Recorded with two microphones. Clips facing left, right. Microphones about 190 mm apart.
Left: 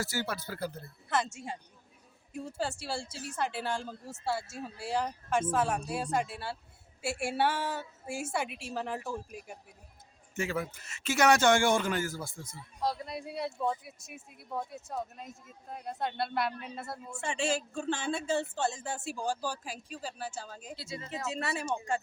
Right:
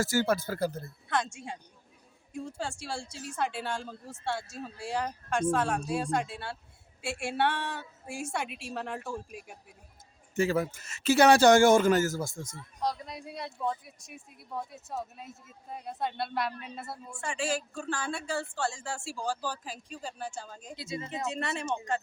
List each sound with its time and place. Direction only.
0.0 s speech: 45° right (ahead or behind)
1.0 s speech: 5° left (ahead or behind)
10.3 s a man's voice: 35° right (ahead or behind)
12.8 s speech: 5° left (ahead or behind)
17.2 s a woman's voice: 25° left (ahead or behind); by 20.7 s 5° left (ahead or behind)
20.7 s speech: 20° right (ahead or behind)
21.2 s speech: centre (ahead or behind)